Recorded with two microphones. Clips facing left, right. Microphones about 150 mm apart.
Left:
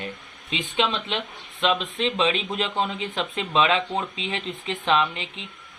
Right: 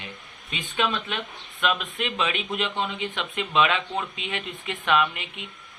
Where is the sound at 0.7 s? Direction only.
25° left (ahead or behind).